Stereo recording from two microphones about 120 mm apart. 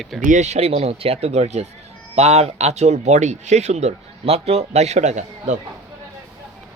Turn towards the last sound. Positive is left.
turn(degrees=-85)